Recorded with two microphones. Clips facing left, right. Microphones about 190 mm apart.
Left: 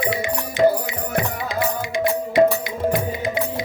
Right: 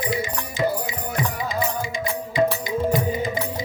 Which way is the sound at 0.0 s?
65° left (ahead or behind).